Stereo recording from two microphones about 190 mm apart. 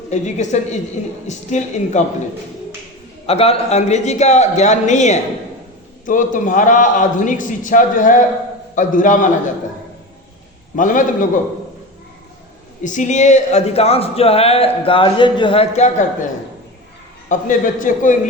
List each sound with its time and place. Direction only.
0.1 s a man's voice: 40° left (ahead or behind)
3.2 s a man's voice: 30° left (ahead or behind)
10.8 s a man's voice: 45° left (ahead or behind)
12.8 s a man's voice: 40° left (ahead or behind)
17.2 s a man's voice: 45° left (ahead or behind)